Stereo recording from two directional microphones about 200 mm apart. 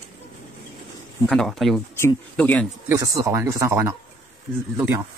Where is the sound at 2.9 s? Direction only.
15° right (ahead or behind).